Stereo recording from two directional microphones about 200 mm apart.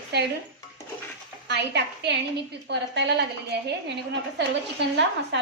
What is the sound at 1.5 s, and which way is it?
A woman's voice, 60° right (ahead or behind).